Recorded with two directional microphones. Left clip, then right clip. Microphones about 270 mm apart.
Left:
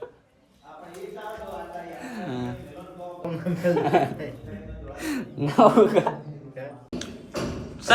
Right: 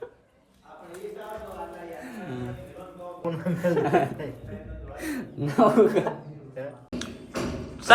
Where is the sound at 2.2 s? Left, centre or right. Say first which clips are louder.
Left 5 dB; left.